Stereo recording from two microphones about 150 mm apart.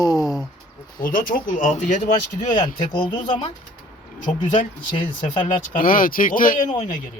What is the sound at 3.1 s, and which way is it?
Speech, 35° left (ahead or behind).